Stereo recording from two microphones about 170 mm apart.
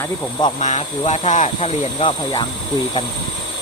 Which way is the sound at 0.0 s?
20° left (ahead or behind).